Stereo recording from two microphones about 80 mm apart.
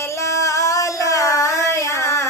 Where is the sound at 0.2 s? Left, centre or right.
Left.